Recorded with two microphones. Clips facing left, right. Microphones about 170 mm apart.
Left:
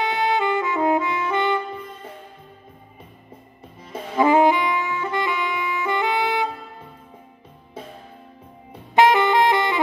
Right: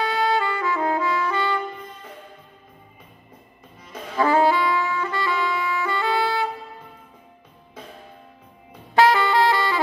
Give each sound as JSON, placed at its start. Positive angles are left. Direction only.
{"t": 0.0, "sound": "music", "side_deg": 20}
{"t": 4.2, "sound": "saxophone", "side_deg": 20}
{"t": 8.9, "sound": "saxophone", "side_deg": 20}